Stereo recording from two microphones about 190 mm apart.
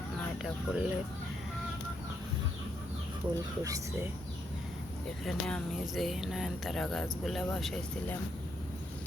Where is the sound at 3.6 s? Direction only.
15° right (ahead or behind).